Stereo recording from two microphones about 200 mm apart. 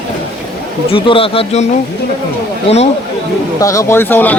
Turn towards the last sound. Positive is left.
turn(degrees=10)  # may be behind; listen again after turning